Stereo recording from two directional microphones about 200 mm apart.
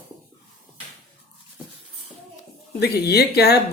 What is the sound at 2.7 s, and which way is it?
Speech, 50° left (ahead or behind).